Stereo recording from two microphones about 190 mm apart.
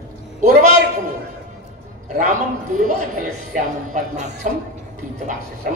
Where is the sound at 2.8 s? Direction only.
45° right (ahead or behind).